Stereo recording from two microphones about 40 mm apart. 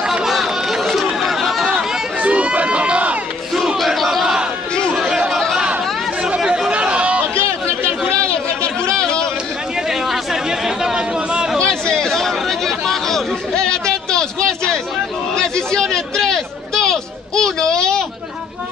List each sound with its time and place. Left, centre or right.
0.0 s run: centre
0.3 s chatter: centre
2.2 s crowd: right
3.8 s crowd: centre
4.9 s chatter: centre
6.2 s chatter: centre
6.7 s a sound: right
8.9 s chatter: centre
9.8 s a sound: centre
11.5 s chatter: centre
13.6 s a sound: centre